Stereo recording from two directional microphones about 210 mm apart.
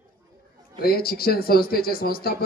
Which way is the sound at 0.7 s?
45° left (ahead or behind).